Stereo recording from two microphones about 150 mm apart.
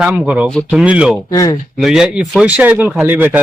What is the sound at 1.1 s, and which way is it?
Speech, 25° left (ahead or behind).